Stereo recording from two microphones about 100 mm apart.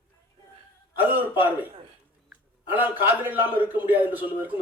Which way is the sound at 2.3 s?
20° right (ahead or behind).